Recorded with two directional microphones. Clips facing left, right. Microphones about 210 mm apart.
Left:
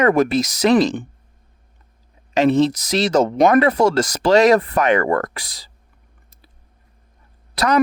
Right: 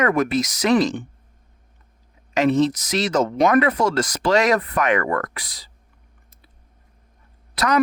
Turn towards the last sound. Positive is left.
turn(degrees=35)  # may be behind; listen again after turning